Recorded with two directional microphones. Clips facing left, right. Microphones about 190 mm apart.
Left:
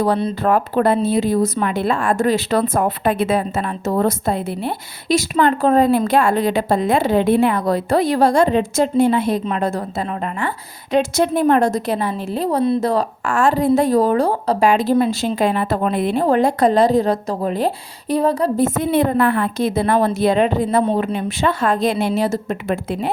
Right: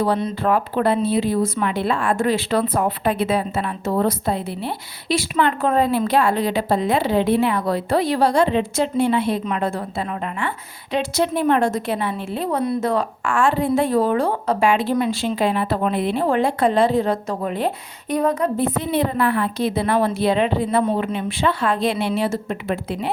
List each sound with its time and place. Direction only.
0.0 s speech: 45° left (ahead or behind)
10.9 s a woman's voice: 45° left (ahead or behind)